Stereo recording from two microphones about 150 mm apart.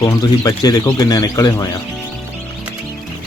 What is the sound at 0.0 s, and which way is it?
A man's voice, 20° left (ahead or behind).